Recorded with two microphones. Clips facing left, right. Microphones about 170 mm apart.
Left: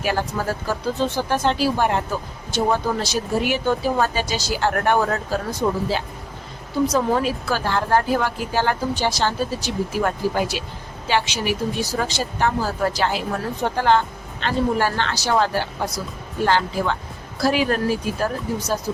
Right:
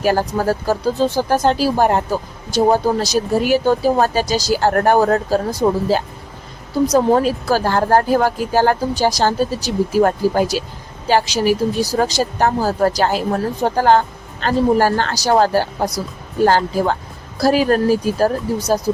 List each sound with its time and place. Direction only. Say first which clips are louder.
0.0 s speech: right 6 dB; 40° right (ahead or behind)